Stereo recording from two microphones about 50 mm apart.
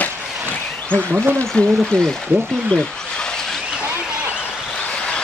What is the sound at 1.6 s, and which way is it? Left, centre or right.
Speech, left.